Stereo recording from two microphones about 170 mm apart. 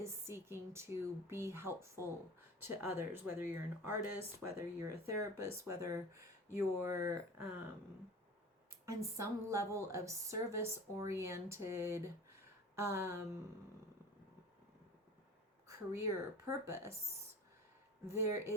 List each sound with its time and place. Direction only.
0.0 s speech: 15° right (ahead or behind)
8.9 s speech: 15° right (ahead or behind)
15.6 s speech: 15° right (ahead or behind)
18.0 s speech: 15° right (ahead or behind)